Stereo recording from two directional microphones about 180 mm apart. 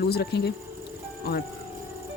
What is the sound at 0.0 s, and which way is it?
Speech, 65° left (ahead or behind).